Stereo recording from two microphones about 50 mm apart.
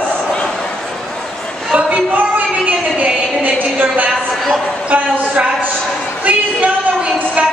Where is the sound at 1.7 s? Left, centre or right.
Right.